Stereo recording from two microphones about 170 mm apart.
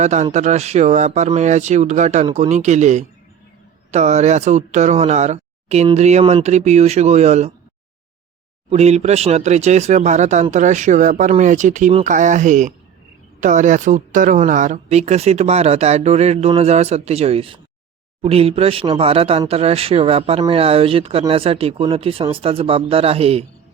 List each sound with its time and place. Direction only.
0.0 s speech: 40° right (ahead or behind)
8.7 s speech: 40° right (ahead or behind)